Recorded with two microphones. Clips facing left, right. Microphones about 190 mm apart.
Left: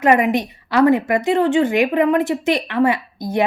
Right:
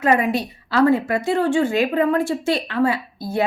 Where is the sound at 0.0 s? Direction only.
20° left (ahead or behind).